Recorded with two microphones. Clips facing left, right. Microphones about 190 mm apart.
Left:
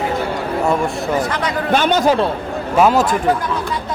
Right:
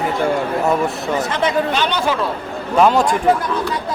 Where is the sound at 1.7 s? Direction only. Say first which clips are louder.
Left 5 dB; 50° left (ahead or behind).